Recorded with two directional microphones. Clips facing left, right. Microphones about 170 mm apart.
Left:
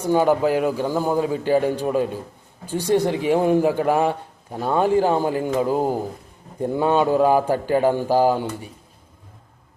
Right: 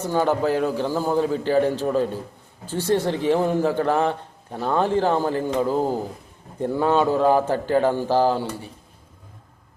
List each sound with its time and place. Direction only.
0.0 s speech: 15° left (ahead or behind)